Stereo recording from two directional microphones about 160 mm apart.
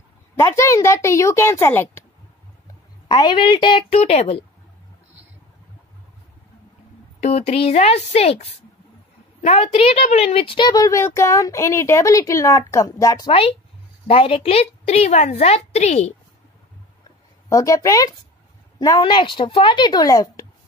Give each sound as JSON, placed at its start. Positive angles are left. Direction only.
{"t": 0.4, "sound": "a woman's voice", "side_deg": 20}
{"t": 3.1, "sound": "a woman's voice", "side_deg": 30}
{"t": 7.2, "sound": "a woman's voice", "side_deg": 45}
{"t": 10.8, "sound": "a woman's voice", "side_deg": 20}
{"t": 13.3, "sound": "a woman's voice", "side_deg": 35}
{"t": 17.5, "sound": "a woman's voice", "side_deg": 20}